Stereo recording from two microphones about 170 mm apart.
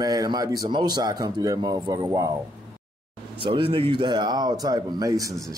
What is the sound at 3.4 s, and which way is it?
A man's voice, 30° right (ahead or behind).